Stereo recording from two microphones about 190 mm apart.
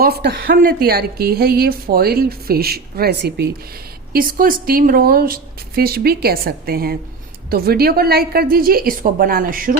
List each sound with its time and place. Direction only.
0.0 s a woman's voice: 55° right (ahead or behind)
4.1 s a woman's voice: 50° right (ahead or behind)